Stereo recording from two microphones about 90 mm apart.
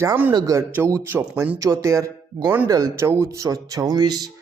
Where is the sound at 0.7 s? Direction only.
30° right (ahead or behind).